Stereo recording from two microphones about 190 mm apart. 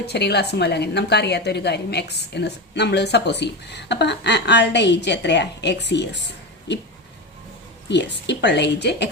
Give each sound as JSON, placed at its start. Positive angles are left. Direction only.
{"t": 0.0, "sound": "a woman's voice", "side_deg": 60}
{"t": 7.9, "sound": "a woman's voice", "side_deg": 65}